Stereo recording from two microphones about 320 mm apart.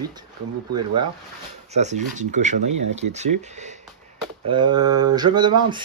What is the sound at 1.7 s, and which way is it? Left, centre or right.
Speech, right.